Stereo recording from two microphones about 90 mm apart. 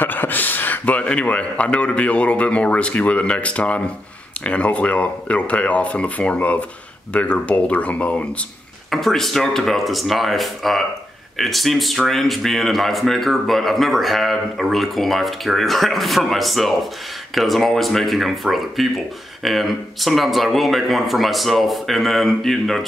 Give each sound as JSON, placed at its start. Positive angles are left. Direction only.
{"t": 0.0, "sound": "speech", "side_deg": 20}
{"t": 8.9, "sound": "speech", "side_deg": 0}